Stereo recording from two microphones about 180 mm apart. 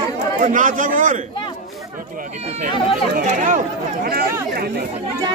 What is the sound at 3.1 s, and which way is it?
Speech, 45° right (ahead or behind).